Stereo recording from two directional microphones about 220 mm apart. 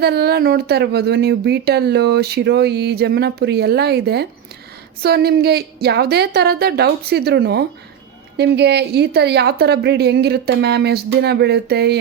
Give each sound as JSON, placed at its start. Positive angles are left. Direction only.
{"t": 0.0, "sound": "speech", "side_deg": -45}